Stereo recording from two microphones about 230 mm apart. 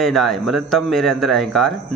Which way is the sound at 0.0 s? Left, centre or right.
Centre.